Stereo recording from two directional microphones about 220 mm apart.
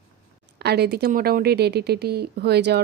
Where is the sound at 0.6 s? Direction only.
50° right (ahead or behind).